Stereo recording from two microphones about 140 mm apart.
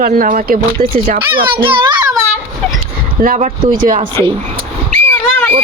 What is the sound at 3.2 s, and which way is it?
Speech, 75° right (ahead or behind).